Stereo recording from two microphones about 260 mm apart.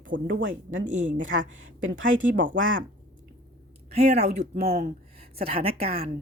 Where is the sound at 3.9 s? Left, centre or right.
Right.